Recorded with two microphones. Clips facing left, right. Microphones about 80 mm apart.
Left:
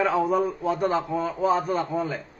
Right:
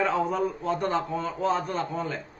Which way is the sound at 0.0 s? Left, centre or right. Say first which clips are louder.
Left 3 dB; centre.